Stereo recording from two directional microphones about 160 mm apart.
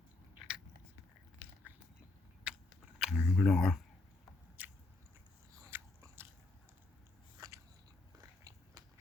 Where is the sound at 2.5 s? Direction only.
5° right (ahead or behind).